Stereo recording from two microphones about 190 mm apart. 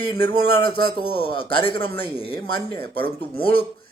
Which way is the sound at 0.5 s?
25° left (ahead or behind).